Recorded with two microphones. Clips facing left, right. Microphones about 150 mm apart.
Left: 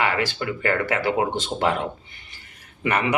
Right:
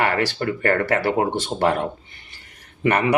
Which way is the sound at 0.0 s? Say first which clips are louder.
Right 3 dB; 40° right (ahead or behind).